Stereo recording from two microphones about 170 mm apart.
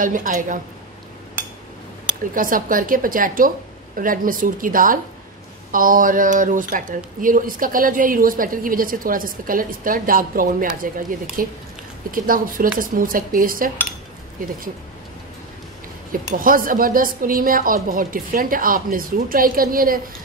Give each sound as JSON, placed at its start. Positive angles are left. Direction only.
{"t": 0.0, "sound": "a woman's voice", "side_deg": -50}
{"t": 2.3, "sound": "a woman's voice", "side_deg": -55}
{"t": 16.3, "sound": "speech", "side_deg": -55}